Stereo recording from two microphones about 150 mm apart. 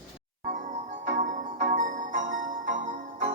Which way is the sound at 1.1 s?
55° right (ahead or behind).